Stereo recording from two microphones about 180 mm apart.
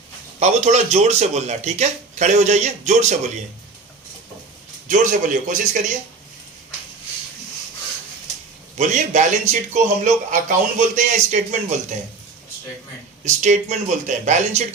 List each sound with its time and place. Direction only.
0.3 s speech: 40° right (ahead or behind)
4.9 s speech: 45° right (ahead or behind)
8.8 s speech: 45° right (ahead or behind)
13.2 s speech: 40° right (ahead or behind)